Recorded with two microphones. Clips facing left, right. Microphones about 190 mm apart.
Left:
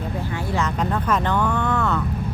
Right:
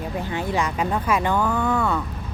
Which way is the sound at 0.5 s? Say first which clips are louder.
Left 1 dB; 10° right (ahead or behind).